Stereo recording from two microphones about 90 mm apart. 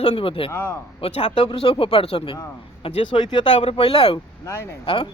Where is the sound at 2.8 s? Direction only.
65° left (ahead or behind); by 4.2 s 80° left.